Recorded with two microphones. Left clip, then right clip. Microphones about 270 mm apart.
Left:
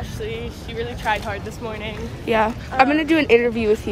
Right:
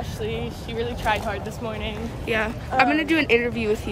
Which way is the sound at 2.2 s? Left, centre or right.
Centre.